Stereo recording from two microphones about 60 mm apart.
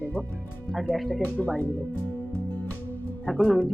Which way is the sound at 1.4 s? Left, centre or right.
Left.